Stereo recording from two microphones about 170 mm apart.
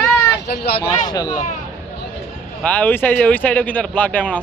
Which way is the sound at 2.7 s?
10° left (ahead or behind).